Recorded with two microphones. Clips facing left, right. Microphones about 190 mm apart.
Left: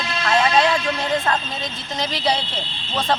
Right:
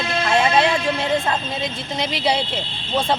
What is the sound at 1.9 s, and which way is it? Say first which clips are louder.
Speech: even; 25° right (ahead or behind).